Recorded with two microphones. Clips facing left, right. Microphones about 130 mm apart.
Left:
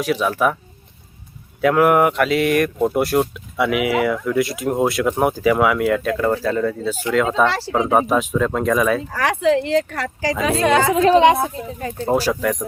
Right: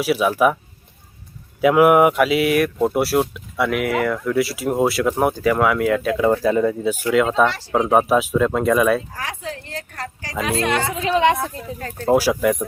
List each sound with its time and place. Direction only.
0.0 s speech: 5° right (ahead or behind)
1.6 s speech: 10° right (ahead or behind)
7.1 s speech: centre (ahead or behind)
9.0 s speech: 75° left (ahead or behind)
11.2 s speech: 20° left (ahead or behind)
12.1 s speech: 10° right (ahead or behind)